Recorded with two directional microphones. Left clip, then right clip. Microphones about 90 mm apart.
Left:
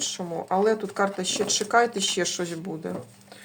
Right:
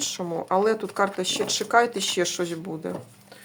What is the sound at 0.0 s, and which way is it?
Speech, 30° right (ahead or behind).